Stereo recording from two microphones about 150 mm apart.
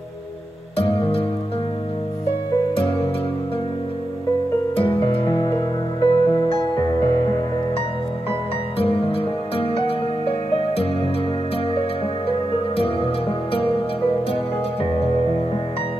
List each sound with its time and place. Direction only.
0.7 s music: 35° left (ahead or behind)
4.7 s music: 35° left (ahead or behind)
8.3 s music: 40° left (ahead or behind)
12.3 s music: 40° left (ahead or behind)